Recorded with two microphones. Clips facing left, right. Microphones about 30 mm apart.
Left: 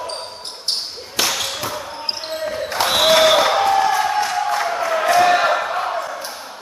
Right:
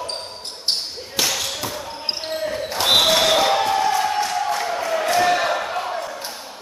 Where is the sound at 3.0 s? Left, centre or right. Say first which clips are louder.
Left 5 dB; centre.